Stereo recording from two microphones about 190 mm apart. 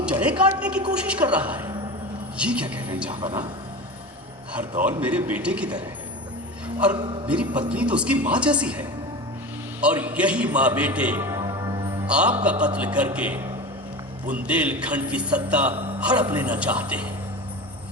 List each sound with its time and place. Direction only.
0.0 s a man's voice: 5° right (ahead or behind)
3.2 s speech: 25° right (ahead or behind)
4.9 s a man's voice: 10° right (ahead or behind)
6.9 s speech: 25° right (ahead or behind)
7.3 s a man's voice: 5° right (ahead or behind)
12.0 s a man's voice: 5° right (ahead or behind)